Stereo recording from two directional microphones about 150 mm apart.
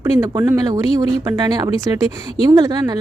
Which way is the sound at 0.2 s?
20° right (ahead or behind).